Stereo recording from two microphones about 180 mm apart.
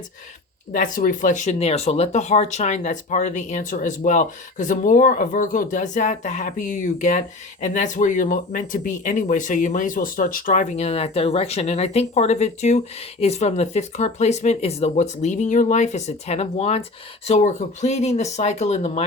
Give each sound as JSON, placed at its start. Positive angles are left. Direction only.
{"t": 0.7, "sound": "speech", "side_deg": 45}